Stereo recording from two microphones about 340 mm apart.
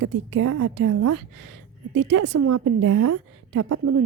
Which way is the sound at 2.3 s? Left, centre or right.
Right.